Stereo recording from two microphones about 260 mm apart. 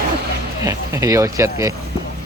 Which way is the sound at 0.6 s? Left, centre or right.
Centre.